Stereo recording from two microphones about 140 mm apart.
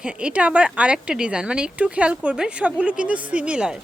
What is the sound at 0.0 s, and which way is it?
A woman's voice, 5° right (ahead or behind).